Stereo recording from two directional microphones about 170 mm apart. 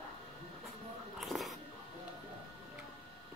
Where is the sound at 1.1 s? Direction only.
Centre (ahead or behind).